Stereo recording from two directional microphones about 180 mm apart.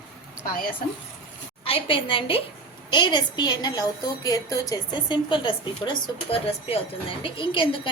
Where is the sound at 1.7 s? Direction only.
30° left (ahead or behind).